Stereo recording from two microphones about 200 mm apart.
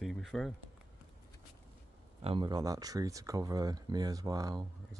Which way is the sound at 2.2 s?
25° right (ahead or behind).